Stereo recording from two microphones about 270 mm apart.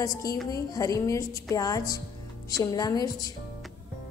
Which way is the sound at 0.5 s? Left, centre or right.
Centre.